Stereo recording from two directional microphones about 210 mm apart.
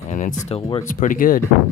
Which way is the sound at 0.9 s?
40° left (ahead or behind).